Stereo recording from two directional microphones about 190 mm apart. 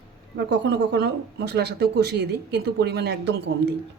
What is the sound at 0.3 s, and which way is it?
Speech, 65° right (ahead or behind).